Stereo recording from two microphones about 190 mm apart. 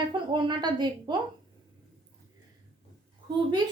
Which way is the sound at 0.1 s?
25° right (ahead or behind).